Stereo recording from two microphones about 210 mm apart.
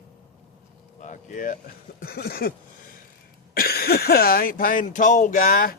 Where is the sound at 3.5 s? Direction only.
45° left (ahead or behind).